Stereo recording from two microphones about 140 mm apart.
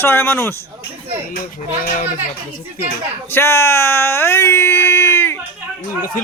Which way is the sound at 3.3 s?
20° left (ahead or behind).